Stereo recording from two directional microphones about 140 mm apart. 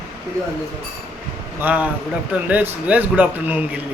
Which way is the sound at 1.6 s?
10° right (ahead or behind).